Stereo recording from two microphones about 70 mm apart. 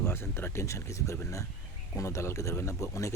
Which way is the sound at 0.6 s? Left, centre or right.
Left.